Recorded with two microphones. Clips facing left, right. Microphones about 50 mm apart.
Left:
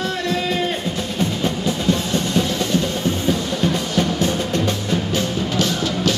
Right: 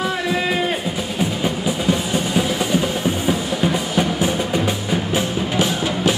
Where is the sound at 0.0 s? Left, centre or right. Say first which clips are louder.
Right 1 dB; centre.